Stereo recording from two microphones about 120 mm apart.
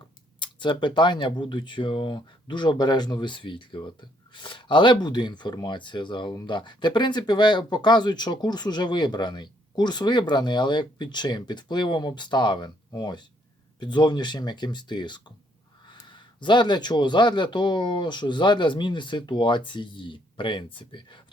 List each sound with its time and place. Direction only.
0.3 s speech: 40° left (ahead or behind)